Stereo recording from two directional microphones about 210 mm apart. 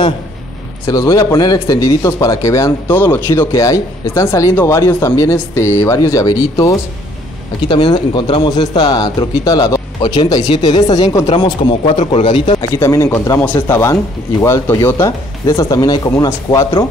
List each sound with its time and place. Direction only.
0.8 s a man's voice: 15° left (ahead or behind)
12.7 s a man's voice: 15° left (ahead or behind)